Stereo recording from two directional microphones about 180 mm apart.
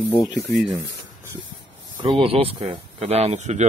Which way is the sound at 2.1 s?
30° right (ahead or behind).